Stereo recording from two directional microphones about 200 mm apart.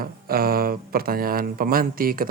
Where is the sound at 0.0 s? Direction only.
50° right (ahead or behind).